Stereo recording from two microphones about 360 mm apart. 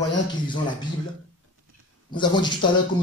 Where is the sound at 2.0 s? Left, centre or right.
Centre.